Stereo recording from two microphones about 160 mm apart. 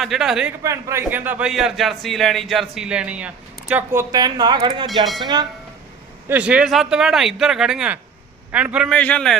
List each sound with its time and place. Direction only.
0.0 s a man's voice: centre (ahead or behind)
0.6 s a man's voice: 20° right (ahead or behind)
4.1 s speech: 25° right (ahead or behind)
6.2 s a man's voice: 10° right (ahead or behind)
8.9 s a man's voice: 5° left (ahead or behind)